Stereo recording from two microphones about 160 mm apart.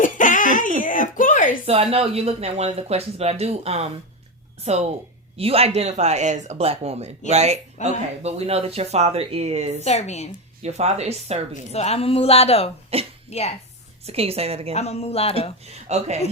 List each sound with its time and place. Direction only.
0.0 s a sound: 55° left (ahead or behind)
1.6 s speech: 40° right (ahead or behind)
9.8 s a woman's voice: 45° left (ahead or behind)
10.6 s speech: 45° right (ahead or behind)
11.7 s a woman's voice: 40° left (ahead or behind)
12.9 s speech: 40° right (ahead or behind)
13.3 s a woman's voice: 40° left (ahead or behind)
14.0 s speech: 40° right (ahead or behind)
14.8 s a woman's voice: 40° left (ahead or behind)
15.6 s speech: 40° right (ahead or behind)